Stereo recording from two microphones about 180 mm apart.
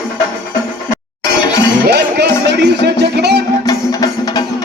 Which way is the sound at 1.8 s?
65° right (ahead or behind).